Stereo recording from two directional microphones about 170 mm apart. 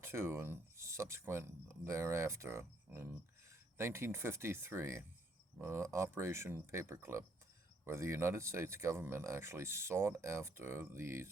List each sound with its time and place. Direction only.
0.0 s speech: 15° right (ahead or behind)